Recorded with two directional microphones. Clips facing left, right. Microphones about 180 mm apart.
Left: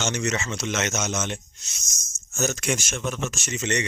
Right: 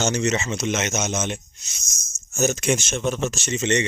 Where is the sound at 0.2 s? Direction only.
25° right (ahead or behind).